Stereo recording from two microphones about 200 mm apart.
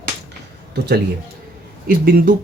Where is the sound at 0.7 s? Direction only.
55° right (ahead or behind).